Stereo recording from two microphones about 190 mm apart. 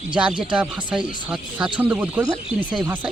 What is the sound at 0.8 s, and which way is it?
Speech, 25° right (ahead or behind).